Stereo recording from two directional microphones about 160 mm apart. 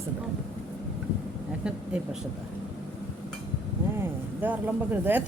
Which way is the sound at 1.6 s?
5° right (ahead or behind).